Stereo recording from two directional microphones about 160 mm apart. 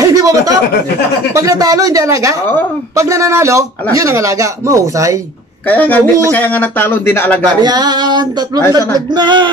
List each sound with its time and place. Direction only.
0.0 s a sound: 20° right (ahead or behind)
1.3 s a man's voice: 20° right (ahead or behind)
5.7 s speech: 10° left (ahead or behind)
7.6 s a man's voice: 25° right (ahead or behind)